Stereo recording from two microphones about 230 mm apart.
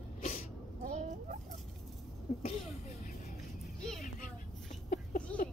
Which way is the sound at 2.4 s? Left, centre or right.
Left.